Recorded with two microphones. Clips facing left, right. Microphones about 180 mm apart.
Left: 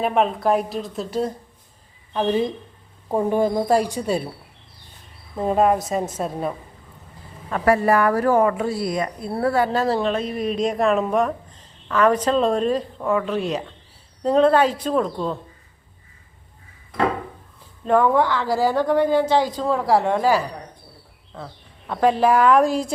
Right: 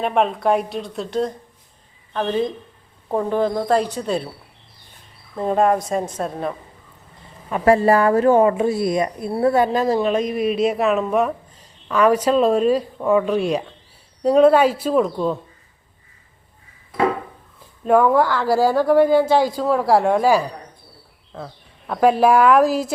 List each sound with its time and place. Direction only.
0.0 s a woman's voice: centre (ahead or behind)
5.4 s a woman's voice: 5° left (ahead or behind)
7.6 s speech: 25° right (ahead or behind)
9.8 s a woman's voice: 10° right (ahead or behind)
17.8 s a woman's voice: 5° right (ahead or behind)
18.3 s a woman's voice: 15° left (ahead or behind)
18.5 s a woman's voice: 10° right (ahead or behind)